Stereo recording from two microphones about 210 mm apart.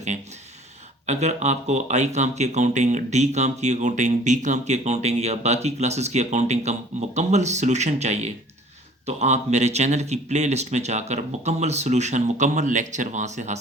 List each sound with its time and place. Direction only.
1.0 s speech: 35° right (ahead or behind)